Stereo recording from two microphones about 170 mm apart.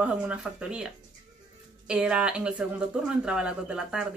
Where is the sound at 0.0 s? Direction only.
5° right (ahead or behind).